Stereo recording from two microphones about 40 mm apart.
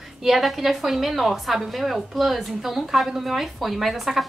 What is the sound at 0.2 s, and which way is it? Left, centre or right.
A woman's voice, centre.